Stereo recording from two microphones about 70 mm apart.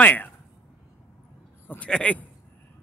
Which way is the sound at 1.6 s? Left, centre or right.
Left.